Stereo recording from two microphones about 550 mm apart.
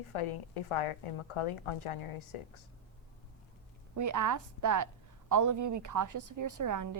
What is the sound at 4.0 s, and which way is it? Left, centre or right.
A woman's voice, right.